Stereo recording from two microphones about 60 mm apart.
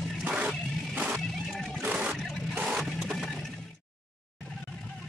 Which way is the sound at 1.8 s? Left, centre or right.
Right.